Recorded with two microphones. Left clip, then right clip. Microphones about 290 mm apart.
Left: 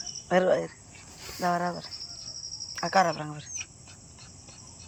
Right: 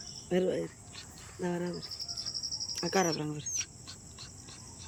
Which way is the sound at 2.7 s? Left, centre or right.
Centre.